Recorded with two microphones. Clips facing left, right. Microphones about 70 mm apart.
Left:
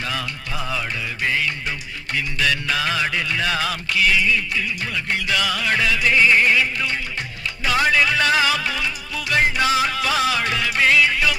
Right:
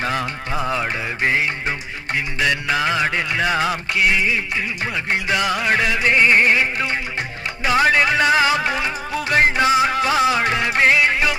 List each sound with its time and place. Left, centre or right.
0.0 s music: right
5.1 s music: right
6.1 s music: centre
7.6 s speech: right
7.9 s music: right
10.8 s music: centre